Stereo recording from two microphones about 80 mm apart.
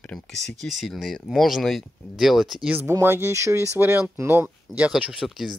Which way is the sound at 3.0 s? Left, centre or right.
Right.